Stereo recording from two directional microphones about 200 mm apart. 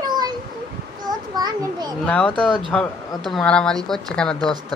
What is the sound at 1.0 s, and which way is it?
Children playing, 20° right (ahead or behind).